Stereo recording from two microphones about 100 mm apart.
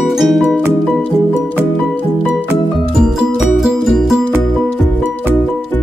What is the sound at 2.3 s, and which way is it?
Music, 5° right (ahead or behind).